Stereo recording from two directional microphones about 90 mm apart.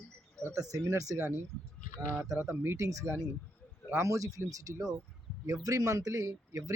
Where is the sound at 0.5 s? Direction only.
40° right (ahead or behind).